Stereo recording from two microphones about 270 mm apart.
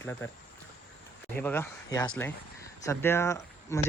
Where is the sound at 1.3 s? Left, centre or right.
Centre.